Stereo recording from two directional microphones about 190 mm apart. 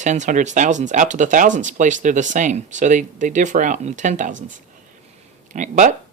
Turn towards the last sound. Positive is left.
turn(degrees=-40)  # may be behind; listen again after turning